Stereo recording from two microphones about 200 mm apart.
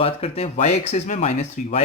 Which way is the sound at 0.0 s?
30° left (ahead or behind).